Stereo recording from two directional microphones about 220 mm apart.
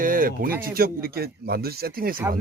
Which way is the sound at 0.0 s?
40° right (ahead or behind).